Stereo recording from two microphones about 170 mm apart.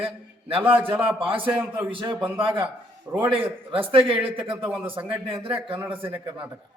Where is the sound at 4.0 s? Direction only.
30° right (ahead or behind).